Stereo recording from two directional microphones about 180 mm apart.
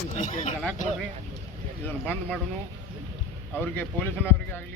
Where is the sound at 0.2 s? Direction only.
40° left (ahead or behind).